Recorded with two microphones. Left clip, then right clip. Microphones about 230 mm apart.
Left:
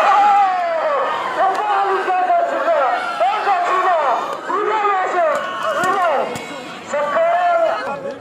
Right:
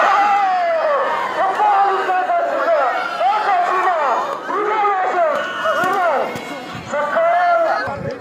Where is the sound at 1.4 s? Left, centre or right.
Left.